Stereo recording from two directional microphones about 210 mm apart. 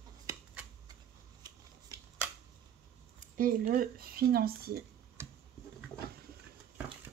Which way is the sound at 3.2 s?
40° right (ahead or behind).